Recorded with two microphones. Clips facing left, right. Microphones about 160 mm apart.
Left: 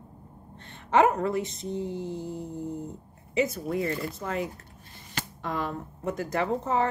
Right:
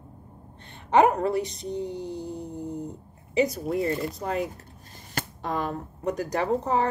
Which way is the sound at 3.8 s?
25° right (ahead or behind).